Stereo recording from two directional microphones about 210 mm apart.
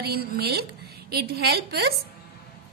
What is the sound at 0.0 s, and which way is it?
A woman's voice, 50° right (ahead or behind).